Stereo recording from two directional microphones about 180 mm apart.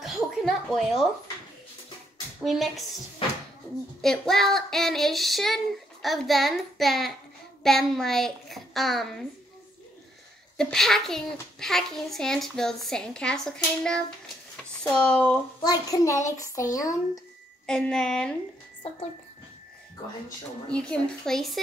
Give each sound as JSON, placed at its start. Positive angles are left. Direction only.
{"t": 0.0, "sound": "a sound", "side_deg": 0}
{"t": 2.4, "sound": "a child's voice", "side_deg": 0}
{"t": 4.0, "sound": "a child's voice", "side_deg": 0}
{"t": 10.6, "sound": "a child's voice", "side_deg": 0}
{"t": 15.6, "sound": "speech", "side_deg": 20}
{"t": 17.6, "sound": "a child's voice", "side_deg": 5}
{"t": 20.7, "sound": "a child's voice", "side_deg": 5}